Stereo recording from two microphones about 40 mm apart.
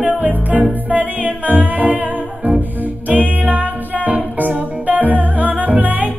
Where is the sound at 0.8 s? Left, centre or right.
Right.